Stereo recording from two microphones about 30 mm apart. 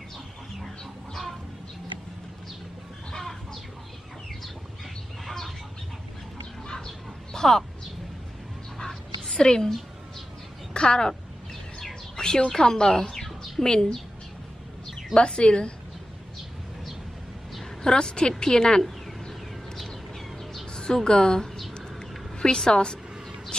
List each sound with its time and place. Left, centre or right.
0.6 s chicken: centre
3.1 s chicken: centre
5.2 s chicken: centre
7.3 s a sound: centre
8.7 s whispering: centre
10.7 s speech: left
12.2 s speech: left
13.1 s bird: centre
13.7 s speech: left
15.1 s a woman's voice: left
17.8 s speech: left
20.7 s a sound: left
21.1 s speech: left
22.7 s a woman's voice: left